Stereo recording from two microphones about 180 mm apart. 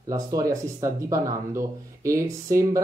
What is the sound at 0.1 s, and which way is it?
Speech, 20° right (ahead or behind).